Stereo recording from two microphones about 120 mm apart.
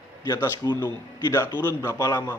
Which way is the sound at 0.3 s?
25° left (ahead or behind).